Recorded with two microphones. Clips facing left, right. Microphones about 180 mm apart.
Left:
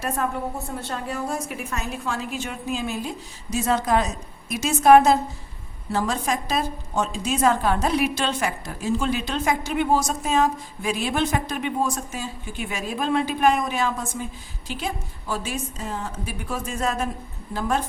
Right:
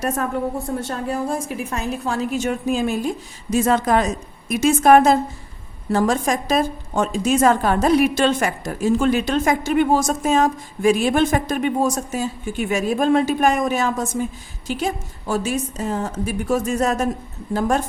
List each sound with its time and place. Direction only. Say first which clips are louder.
0.8 s a woman's voice: right 5 dB; 45° right (ahead or behind)